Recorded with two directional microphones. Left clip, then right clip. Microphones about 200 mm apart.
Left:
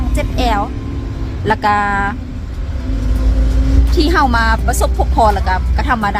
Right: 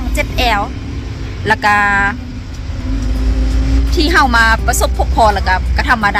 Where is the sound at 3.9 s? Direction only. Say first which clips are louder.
Right 3 dB; 10° left (ahead or behind).